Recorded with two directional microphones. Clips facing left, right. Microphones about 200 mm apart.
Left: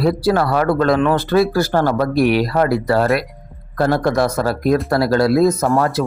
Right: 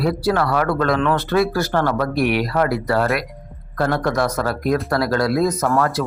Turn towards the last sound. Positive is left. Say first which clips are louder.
# left 2 dB
turn(degrees=30)  # may be behind; listen again after turning